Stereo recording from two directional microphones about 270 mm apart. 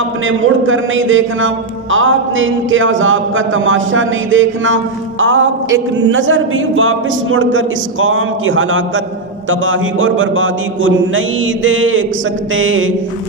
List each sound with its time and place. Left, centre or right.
0.3 s a man's voice: right